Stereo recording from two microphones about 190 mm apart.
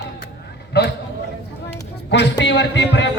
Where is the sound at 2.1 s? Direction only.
65° left (ahead or behind).